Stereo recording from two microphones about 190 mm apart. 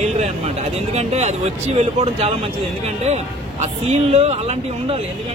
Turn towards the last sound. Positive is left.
turn(degrees=-35)  # may be behind; listen again after turning